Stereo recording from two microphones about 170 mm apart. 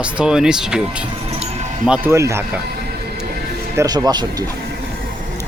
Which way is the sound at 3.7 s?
20° right (ahead or behind).